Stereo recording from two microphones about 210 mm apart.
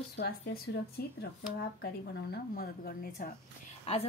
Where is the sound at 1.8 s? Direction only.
50° left (ahead or behind).